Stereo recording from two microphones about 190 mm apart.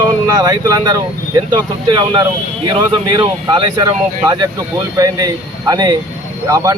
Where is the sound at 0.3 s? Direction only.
20° right (ahead or behind).